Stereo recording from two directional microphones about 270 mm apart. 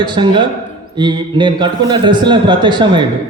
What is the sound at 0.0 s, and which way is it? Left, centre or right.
A man's voice, centre.